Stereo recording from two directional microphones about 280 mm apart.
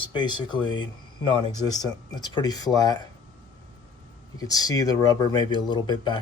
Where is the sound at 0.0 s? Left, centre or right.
Centre.